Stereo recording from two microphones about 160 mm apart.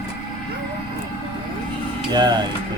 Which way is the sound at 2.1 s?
25° right (ahead or behind).